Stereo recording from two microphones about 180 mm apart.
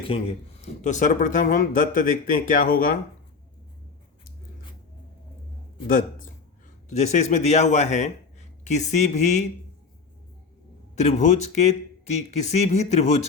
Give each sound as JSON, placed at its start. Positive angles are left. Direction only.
{"t": 0.0, "sound": "a man's voice", "side_deg": 30}
{"t": 5.9, "sound": "a man's voice", "side_deg": 50}
{"t": 11.0, "sound": "a man's voice", "side_deg": 40}